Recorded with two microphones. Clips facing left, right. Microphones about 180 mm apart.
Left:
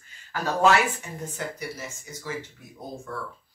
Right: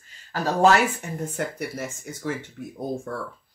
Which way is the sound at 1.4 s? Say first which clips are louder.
Right 4 dB; 55° right (ahead or behind).